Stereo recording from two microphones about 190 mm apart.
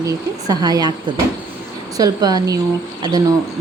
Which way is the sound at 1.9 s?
20° right (ahead or behind).